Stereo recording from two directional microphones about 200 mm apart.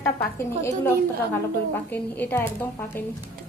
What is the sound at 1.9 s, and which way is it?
Speech, 10° left (ahead or behind).